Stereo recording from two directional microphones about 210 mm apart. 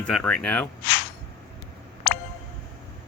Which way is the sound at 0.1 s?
5° left (ahead or behind).